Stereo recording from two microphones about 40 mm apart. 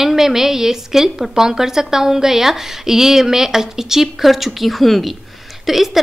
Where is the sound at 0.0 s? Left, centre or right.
Centre.